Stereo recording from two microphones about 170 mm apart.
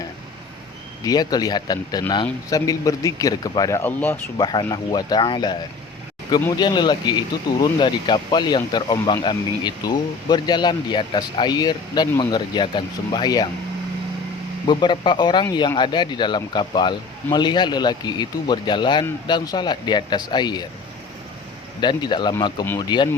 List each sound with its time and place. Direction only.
1.0 s speech: 25° left (ahead or behind)
4.4 s speech: 25° left (ahead or behind)
6.6 s speech: 25° left (ahead or behind)
14.7 s speech: 25° left (ahead or behind)
21.8 s speech: 25° left (ahead or behind)